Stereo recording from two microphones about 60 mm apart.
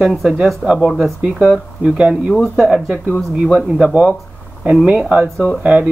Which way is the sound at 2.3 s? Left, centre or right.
Centre.